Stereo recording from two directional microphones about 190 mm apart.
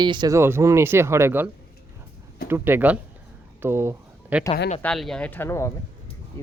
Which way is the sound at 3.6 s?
15° right (ahead or behind).